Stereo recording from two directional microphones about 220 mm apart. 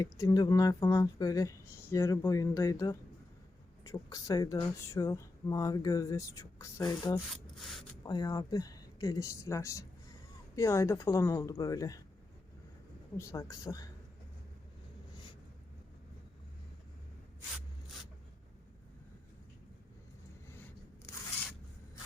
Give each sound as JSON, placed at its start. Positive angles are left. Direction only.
{"t": 0.0, "sound": "speech", "side_deg": 15}
{"t": 13.1, "sound": "speech", "side_deg": 15}
{"t": 15.1, "sound": "a sound", "side_deg": 20}